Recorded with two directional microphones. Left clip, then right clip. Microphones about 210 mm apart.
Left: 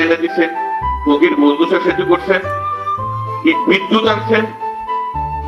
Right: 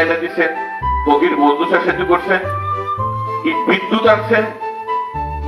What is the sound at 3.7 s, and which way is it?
Speech, 45° right (ahead or behind).